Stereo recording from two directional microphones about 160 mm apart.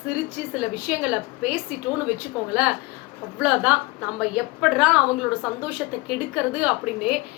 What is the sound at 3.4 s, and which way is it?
A woman's voice, 5° right (ahead or behind).